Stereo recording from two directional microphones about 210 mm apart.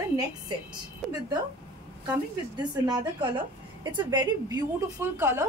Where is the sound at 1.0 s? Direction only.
Centre (ahead or behind).